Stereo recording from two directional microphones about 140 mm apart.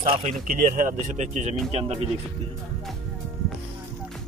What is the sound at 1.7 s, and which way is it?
Speech, 45° right (ahead or behind).